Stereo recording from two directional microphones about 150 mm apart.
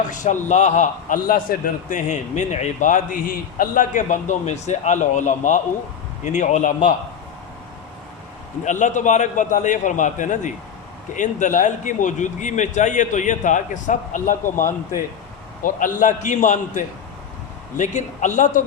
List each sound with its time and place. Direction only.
0.1 s a man's voice: 55° left (ahead or behind)
8.6 s a man's voice: 55° left (ahead or behind)